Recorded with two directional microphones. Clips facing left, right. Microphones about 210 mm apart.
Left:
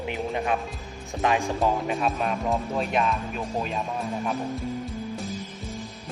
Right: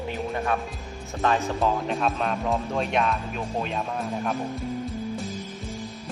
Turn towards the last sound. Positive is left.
turn(degrees=0)  # may be behind; listen again after turning